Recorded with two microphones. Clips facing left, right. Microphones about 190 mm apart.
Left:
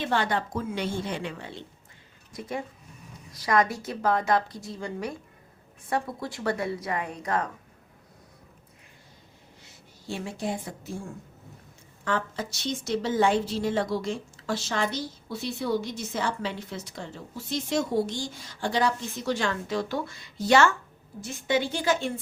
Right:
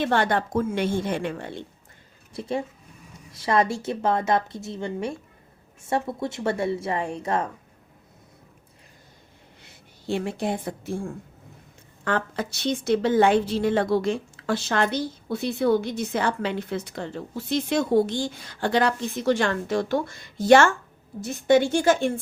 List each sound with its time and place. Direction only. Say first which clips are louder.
0.0 s a woman's voice: right 4 dB; 55° right (ahead or behind)
2.3 s a woman's voice: right 5 dB; 30° right (ahead or behind)
9.6 s a woman's voice: right 7 dB; 60° right (ahead or behind)